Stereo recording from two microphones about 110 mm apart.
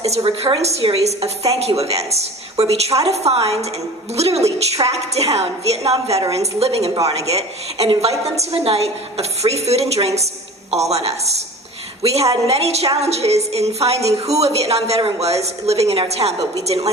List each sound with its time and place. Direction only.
0.0 s a woman's voice: 65° right (ahead or behind)